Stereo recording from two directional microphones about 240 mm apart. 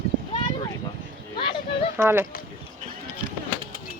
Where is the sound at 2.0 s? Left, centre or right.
Centre.